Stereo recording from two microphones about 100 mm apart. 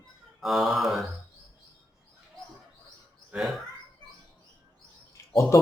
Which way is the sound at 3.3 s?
Centre (ahead or behind).